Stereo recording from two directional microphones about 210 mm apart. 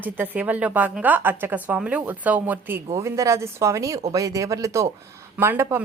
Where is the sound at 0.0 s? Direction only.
10° right (ahead or behind).